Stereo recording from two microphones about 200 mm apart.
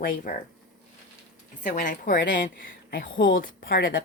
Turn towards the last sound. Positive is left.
turn(degrees=50)  # may be behind; listen again after turning